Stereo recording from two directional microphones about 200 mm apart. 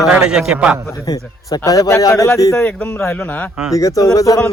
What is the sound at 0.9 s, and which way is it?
Speech, 15° left (ahead or behind).